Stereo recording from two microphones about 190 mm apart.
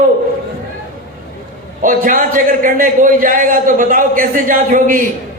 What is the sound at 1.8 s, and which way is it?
A man's voice, 45° right (ahead or behind).